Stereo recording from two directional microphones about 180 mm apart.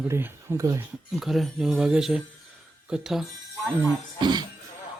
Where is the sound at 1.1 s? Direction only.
Centre (ahead or behind).